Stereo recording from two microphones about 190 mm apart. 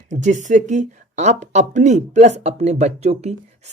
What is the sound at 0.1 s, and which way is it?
Speech, 40° right (ahead or behind).